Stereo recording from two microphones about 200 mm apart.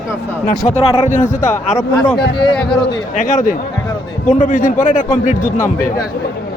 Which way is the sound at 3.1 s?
40° left (ahead or behind).